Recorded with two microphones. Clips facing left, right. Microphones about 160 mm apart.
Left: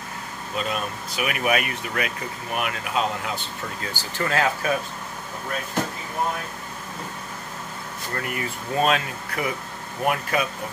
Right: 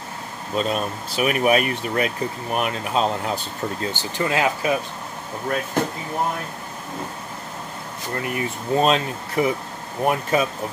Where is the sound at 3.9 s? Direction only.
20° right (ahead or behind).